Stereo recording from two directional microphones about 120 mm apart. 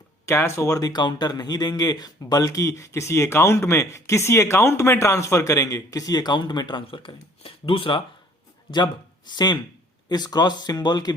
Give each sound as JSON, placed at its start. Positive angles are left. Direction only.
{"t": 0.3, "sound": "speech", "side_deg": 20}
{"t": 9.3, "sound": "speech", "side_deg": 35}